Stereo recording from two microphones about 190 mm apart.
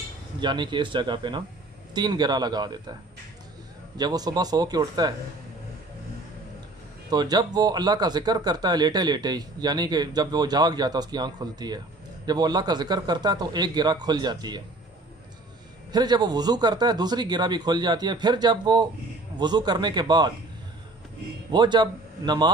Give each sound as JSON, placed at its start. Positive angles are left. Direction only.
{"t": 0.4, "sound": "speech", "side_deg": -25}
{"t": 3.9, "sound": "speech", "side_deg": -20}
{"t": 7.1, "sound": "speech", "side_deg": -20}
{"t": 15.9, "sound": "speech", "side_deg": -20}
{"t": 21.5, "sound": "a man's voice", "side_deg": -25}